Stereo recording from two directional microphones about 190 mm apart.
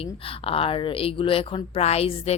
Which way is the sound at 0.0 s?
30° left (ahead or behind).